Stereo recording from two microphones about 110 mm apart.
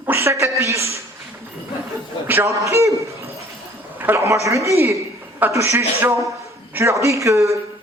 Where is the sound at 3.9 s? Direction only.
20° right (ahead or behind).